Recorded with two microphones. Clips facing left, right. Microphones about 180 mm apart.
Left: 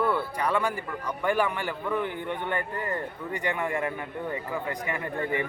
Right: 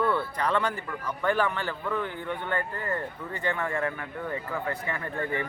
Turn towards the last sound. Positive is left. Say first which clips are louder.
# left 2 dB
turn(degrees=20)  # may be behind; listen again after turning